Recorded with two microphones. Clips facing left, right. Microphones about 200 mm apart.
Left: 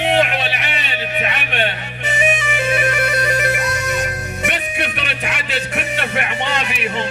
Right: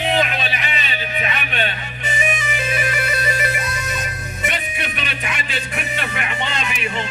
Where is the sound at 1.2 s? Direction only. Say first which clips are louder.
Left 2 dB; 65° left (ahead or behind).